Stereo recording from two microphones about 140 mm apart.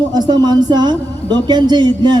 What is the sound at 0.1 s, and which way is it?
A man's voice, 30° right (ahead or behind).